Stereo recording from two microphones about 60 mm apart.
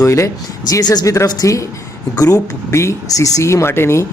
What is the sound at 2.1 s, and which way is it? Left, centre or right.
Speech, left.